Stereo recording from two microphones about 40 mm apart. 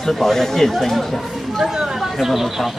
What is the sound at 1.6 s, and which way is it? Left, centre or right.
Chatter, centre.